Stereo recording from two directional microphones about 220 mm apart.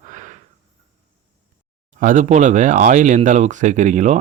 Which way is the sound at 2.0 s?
35° right (ahead or behind).